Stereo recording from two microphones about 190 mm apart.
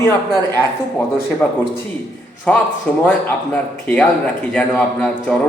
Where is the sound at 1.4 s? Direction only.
10° left (ahead or behind).